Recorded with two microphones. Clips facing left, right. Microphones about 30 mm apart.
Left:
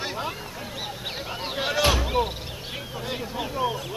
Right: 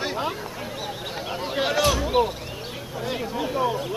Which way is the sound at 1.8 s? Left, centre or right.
Left.